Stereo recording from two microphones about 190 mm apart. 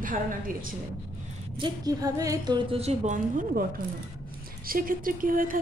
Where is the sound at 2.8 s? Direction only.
35° right (ahead or behind).